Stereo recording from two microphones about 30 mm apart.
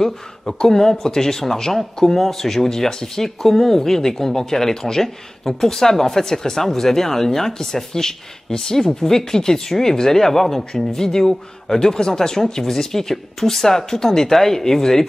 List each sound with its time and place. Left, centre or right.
0.7 s speech: centre
2.1 s speech: centre
8.8 s speech: centre
9.3 s speech: centre